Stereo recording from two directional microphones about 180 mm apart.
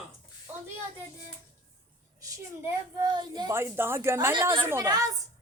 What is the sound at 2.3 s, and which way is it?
A woman's voice, 20° right (ahead or behind).